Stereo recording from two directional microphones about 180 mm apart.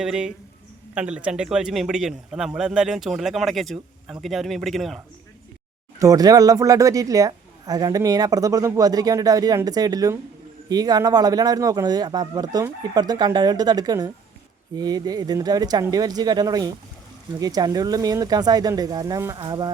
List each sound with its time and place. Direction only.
0.0 s a man's voice: 5° right (ahead or behind)
6.0 s speech: 20° right (ahead or behind)